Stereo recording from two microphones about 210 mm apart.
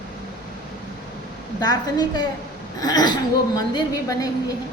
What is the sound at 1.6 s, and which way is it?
A woman's voice, 20° left (ahead or behind).